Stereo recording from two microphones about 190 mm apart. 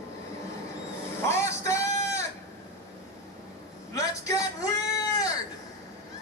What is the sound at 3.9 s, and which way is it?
Speech, 20° left (ahead or behind).